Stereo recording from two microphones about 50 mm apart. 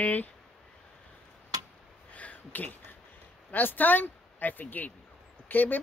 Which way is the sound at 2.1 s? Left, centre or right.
Left.